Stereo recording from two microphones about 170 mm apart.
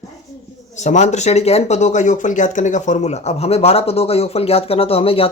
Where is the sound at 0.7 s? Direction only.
45° left (ahead or behind).